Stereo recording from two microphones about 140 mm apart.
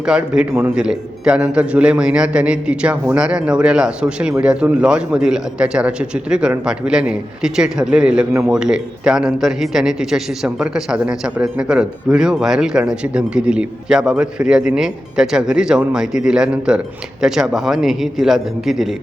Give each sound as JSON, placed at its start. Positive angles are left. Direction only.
{"t": 0.0, "sound": "a man's voice", "side_deg": -5}
{"t": 8.3, "sound": "a man's voice", "side_deg": -20}
{"t": 8.5, "sound": "a man's voice", "side_deg": -5}